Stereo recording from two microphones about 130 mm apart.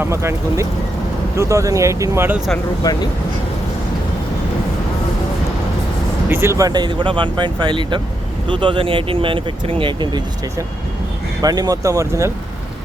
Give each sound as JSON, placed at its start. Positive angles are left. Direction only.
{"t": 0.0, "sound": "speech", "side_deg": -20}
{"t": 2.8, "sound": "speech", "side_deg": 30}
{"t": 6.2, "sound": "speech", "side_deg": -20}
{"t": 11.4, "sound": "speech", "side_deg": -30}